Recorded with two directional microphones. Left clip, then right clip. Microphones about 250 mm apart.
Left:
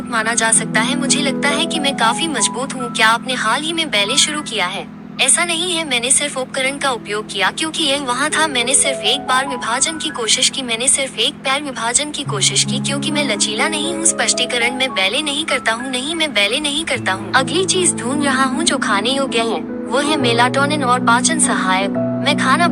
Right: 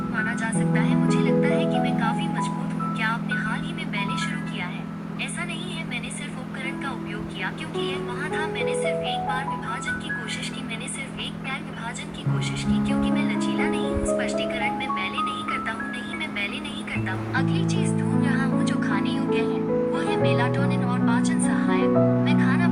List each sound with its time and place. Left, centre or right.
0.1 s speech: left
7.3 s speech: left